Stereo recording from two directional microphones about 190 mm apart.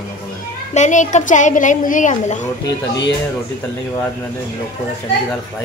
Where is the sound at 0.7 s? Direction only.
40° left (ahead or behind).